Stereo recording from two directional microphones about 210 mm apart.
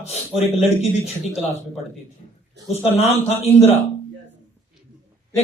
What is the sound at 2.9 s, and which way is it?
Speech, 30° left (ahead or behind).